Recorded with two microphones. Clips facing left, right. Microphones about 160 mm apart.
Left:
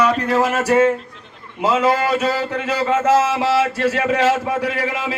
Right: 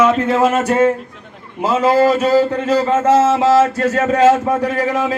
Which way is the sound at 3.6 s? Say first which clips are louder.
Right 4 dB; 45° right (ahead or behind).